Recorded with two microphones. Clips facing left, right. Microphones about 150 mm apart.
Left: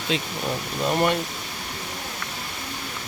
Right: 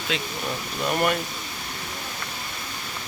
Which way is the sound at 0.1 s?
35° left (ahead or behind).